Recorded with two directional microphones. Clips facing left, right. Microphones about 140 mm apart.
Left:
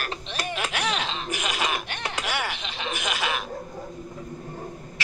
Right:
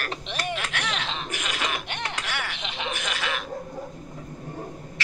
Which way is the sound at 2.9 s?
15° left (ahead or behind).